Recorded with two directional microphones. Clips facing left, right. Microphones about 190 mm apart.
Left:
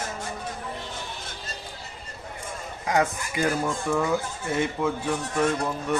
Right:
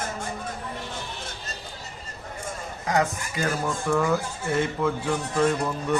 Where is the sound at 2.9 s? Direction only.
15° left (ahead or behind).